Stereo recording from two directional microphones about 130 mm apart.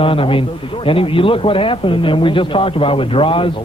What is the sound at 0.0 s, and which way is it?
A man's voice, 45° left (ahead or behind).